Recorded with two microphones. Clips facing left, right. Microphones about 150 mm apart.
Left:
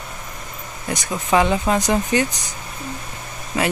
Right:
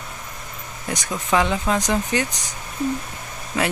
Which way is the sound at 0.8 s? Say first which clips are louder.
Left 2 dB; 5° left (ahead or behind).